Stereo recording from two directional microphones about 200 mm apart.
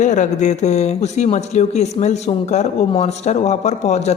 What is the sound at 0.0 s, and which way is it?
Speech, 35° left (ahead or behind).